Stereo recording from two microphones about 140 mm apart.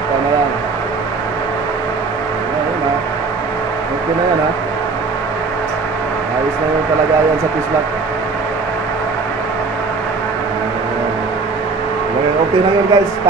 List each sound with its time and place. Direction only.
12.9 s a man's voice: 25° right (ahead or behind)